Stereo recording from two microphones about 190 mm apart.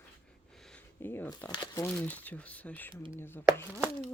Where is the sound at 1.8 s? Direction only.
5° left (ahead or behind).